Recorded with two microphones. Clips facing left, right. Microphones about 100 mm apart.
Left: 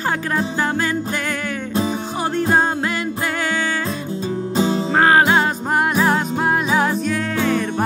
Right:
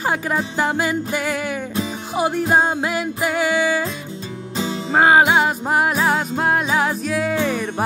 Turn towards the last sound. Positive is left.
turn(degrees=-5)  # may be behind; listen again after turning